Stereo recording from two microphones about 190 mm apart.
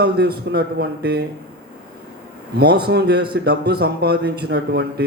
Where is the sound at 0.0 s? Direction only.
60° right (ahead or behind).